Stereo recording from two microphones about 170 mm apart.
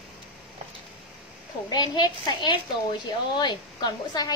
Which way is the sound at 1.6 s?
25° left (ahead or behind).